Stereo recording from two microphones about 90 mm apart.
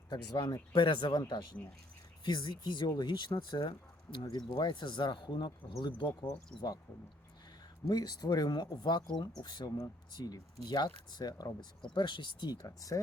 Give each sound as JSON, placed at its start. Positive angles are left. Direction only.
{"t": 0.1, "sound": "speech", "side_deg": 55}
{"t": 2.2, "sound": "speech", "side_deg": 55}
{"t": 7.9, "sound": "speech", "side_deg": 50}
{"t": 11.9, "sound": "speech", "side_deg": 60}
{"t": 12.6, "sound": "speech", "side_deg": 40}